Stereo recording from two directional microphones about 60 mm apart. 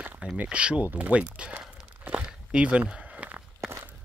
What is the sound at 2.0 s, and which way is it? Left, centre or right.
Walk, centre.